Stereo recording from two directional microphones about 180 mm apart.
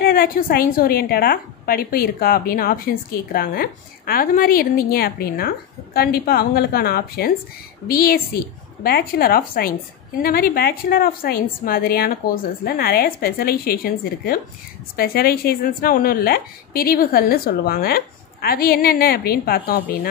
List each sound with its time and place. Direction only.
0.0 s a woman's voice: 55° left (ahead or behind)